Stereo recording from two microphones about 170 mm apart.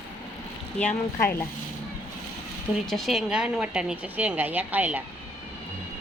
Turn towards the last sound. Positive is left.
turn(degrees=-10)  # may be behind; listen again after turning